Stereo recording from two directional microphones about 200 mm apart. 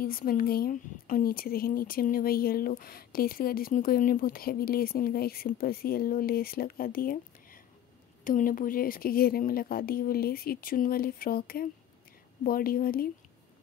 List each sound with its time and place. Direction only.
0.0 s speech: 45° left (ahead or behind)